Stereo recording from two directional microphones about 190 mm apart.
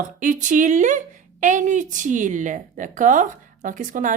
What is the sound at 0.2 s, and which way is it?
A woman's voice, 40° right (ahead or behind).